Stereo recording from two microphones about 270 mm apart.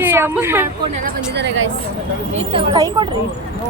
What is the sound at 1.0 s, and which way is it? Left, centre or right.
Speech, right.